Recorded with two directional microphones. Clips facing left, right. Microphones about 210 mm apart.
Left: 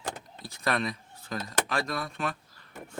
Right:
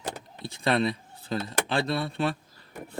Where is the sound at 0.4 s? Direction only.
30° right (ahead or behind).